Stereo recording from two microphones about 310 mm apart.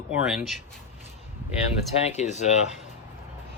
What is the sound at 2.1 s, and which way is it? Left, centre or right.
Speech, left.